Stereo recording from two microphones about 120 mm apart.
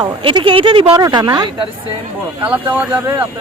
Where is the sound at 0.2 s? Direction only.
45° right (ahead or behind).